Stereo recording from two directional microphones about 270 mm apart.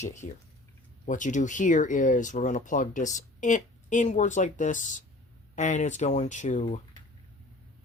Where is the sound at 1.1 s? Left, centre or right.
Left.